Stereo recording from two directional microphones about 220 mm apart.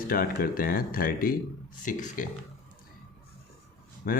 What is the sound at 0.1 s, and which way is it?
Speech, 40° left (ahead or behind).